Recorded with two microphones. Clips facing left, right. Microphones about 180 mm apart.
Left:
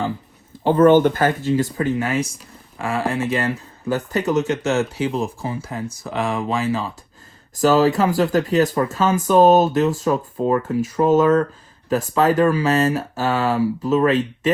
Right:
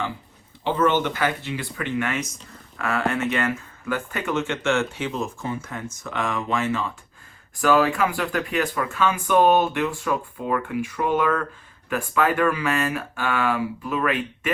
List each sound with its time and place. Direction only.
0.6 s speech: 50° left (ahead or behind)
1.8 s speech: 35° left (ahead or behind)